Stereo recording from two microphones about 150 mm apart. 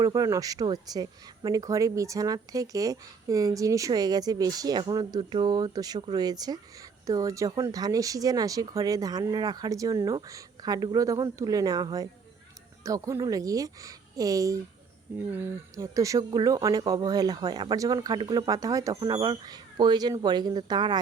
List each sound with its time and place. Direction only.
0.0 s speech: 25° right (ahead or behind)